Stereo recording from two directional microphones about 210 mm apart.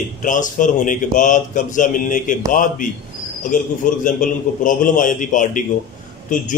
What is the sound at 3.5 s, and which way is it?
A man's voice, 40° left (ahead or behind).